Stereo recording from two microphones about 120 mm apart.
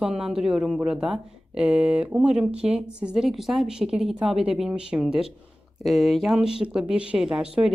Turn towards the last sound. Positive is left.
turn(degrees=-5)  # may be behind; listen again after turning